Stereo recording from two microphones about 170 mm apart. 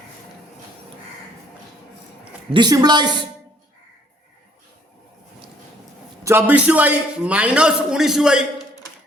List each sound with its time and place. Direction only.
2.5 s a woman's voice: 25° right (ahead or behind)
6.2 s a man's voice: 10° right (ahead or behind)